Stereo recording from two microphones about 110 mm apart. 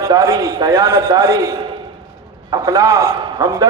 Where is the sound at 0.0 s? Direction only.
25° right (ahead or behind).